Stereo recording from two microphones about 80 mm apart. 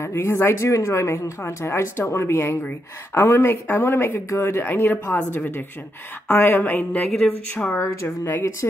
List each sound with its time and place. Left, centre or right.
0.0 s speech: left
7.7 s speech: left